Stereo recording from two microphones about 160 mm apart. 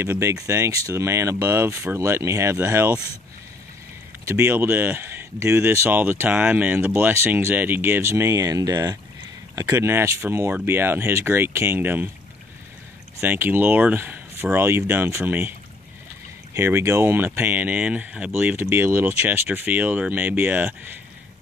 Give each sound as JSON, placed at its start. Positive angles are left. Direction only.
{"t": 0.0, "sound": "speech", "side_deg": -15}
{"t": 4.3, "sound": "speech", "side_deg": -15}
{"t": 13.2, "sound": "speech", "side_deg": -10}
{"t": 16.5, "sound": "speech", "side_deg": -15}